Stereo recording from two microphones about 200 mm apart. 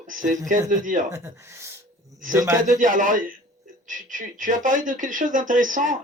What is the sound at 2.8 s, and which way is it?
Speech, 40° right (ahead or behind).